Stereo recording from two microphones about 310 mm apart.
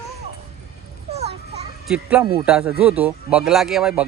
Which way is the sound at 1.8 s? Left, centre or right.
Centre.